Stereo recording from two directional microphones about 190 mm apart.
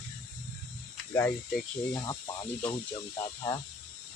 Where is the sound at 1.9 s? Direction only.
15° left (ahead or behind).